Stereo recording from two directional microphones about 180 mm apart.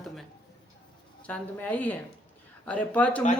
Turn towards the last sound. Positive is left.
turn(degrees=10)  # may be behind; listen again after turning